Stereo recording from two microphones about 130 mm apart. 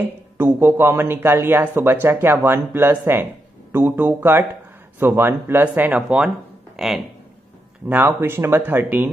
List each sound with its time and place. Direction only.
0.4 s speech: 15° right (ahead or behind); by 6.9 s centre (ahead or behind)
7.9 s speech: 15° right (ahead or behind)